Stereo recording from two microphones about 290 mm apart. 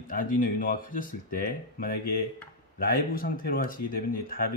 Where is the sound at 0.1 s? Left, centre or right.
Left.